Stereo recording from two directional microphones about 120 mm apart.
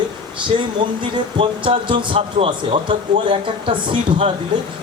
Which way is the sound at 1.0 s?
45° right (ahead or behind).